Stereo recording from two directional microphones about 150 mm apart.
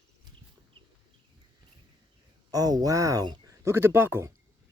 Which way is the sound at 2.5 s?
25° right (ahead or behind).